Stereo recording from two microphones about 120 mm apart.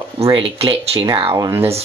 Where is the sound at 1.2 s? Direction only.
25° right (ahead or behind).